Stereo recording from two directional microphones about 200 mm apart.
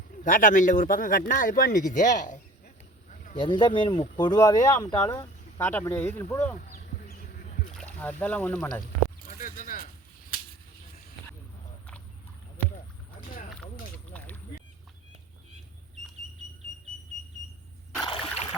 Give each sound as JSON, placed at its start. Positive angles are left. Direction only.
{"t": 0.3, "sound": "speech", "side_deg": 40}
{"t": 3.3, "sound": "speech", "side_deg": 25}
{"t": 7.7, "sound": "speech", "side_deg": 5}
{"t": 9.4, "sound": "a sound", "side_deg": 40}
{"t": 13.9, "sound": "boat", "side_deg": 5}
{"t": 18.0, "sound": "a sound", "side_deg": 25}